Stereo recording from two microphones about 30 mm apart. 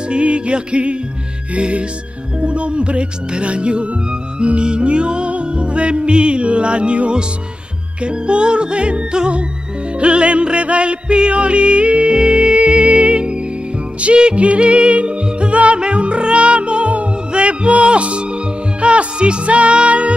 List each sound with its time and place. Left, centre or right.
0.1 s music: right